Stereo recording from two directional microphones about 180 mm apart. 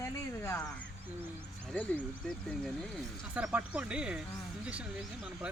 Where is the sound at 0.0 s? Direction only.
15° left (ahead or behind).